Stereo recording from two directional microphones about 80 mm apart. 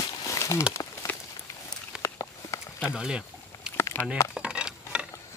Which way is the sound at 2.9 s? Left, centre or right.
Centre.